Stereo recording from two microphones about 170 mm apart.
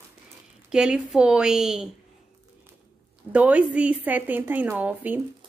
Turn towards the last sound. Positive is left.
turn(degrees=-10)  # may be behind; listen again after turning